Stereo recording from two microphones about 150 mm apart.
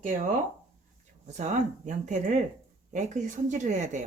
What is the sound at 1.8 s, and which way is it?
Speech, 55° right (ahead or behind).